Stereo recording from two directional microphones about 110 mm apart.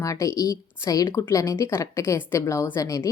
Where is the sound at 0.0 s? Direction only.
30° left (ahead or behind).